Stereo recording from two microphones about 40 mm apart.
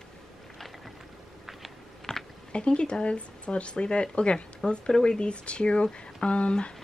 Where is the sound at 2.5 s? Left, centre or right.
Left.